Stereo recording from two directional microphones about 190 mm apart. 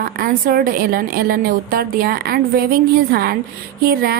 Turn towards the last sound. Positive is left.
turn(degrees=-55)  # may be behind; listen again after turning